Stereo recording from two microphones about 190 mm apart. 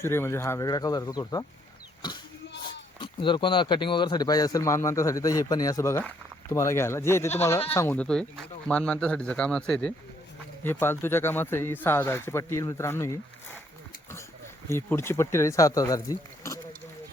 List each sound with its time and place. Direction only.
0.0 s a man's voice: 15° left (ahead or behind)
2.6 s a man's voice: 25° left (ahead or behind)
14.7 s a man's voice: 15° left (ahead or behind)